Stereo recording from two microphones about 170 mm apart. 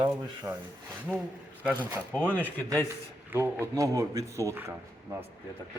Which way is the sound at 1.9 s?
10° right (ahead or behind).